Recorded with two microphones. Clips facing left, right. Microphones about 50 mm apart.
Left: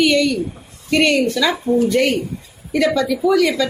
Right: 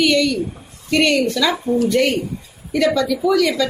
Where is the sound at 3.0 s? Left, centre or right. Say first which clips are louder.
Left 1 dB; centre.